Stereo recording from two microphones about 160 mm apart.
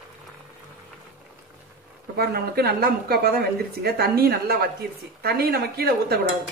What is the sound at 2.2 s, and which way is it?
A woman's voice, 80° right.